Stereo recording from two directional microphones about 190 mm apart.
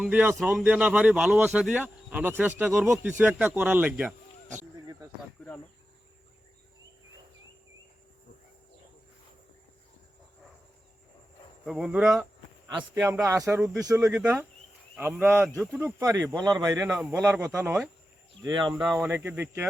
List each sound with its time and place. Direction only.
0.0 s a man's voice: 5° right (ahead or behind)
11.6 s speech: centre (ahead or behind)
12.7 s a man's voice: 15° right (ahead or behind)
18.4 s speech: 20° right (ahead or behind)
18.9 s a man's voice: 10° right (ahead or behind)